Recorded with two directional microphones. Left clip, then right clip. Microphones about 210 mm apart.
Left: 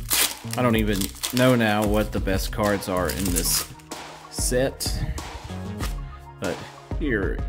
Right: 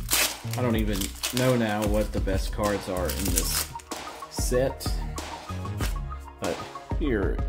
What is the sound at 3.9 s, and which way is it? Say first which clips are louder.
Music: right 1 dB; centre (ahead or behind).